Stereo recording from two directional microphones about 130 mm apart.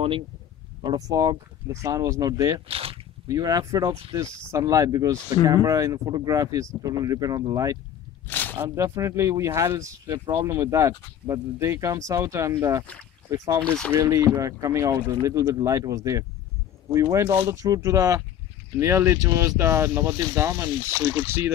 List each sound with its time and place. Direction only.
0.8 s speech: 25° right (ahead or behind)
2.7 s speech: 45° right (ahead or behind)
3.3 s speech: 30° right (ahead or behind)
8.3 s a sound: 15° left (ahead or behind)
8.6 s speech: 25° right (ahead or behind)
13.7 s speech: 5° left (ahead or behind)
13.9 s speech: 25° right (ahead or behind)